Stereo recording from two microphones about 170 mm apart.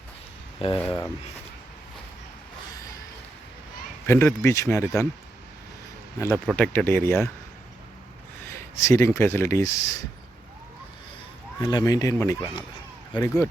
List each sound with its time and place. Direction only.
0.9 s speech: 15° left (ahead or behind)
4.0 s speech: 15° left (ahead or behind)
6.1 s speech: 15° left (ahead or behind)
8.4 s speech: 15° left (ahead or behind)
11.6 s speech: 20° left (ahead or behind)